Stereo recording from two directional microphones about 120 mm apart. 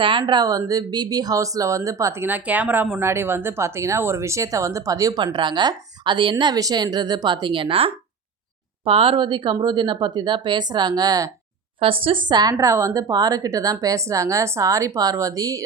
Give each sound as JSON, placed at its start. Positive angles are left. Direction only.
{"t": 0.0, "sound": "speech", "side_deg": -40}
{"t": 11.8, "sound": "speech", "side_deg": -50}